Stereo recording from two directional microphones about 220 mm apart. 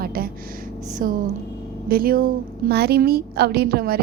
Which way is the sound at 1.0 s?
40° right (ahead or behind).